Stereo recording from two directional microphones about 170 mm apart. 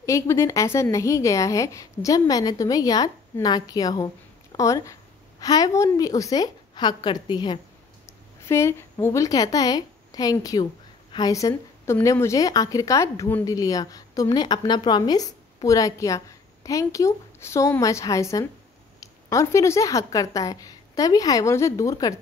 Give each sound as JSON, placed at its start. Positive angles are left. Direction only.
{"t": 0.0, "sound": "a woman's voice", "side_deg": 15}
{"t": 8.5, "sound": "a woman's voice", "side_deg": 15}